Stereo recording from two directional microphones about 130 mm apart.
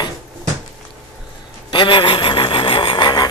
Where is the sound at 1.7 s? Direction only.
40° left (ahead or behind).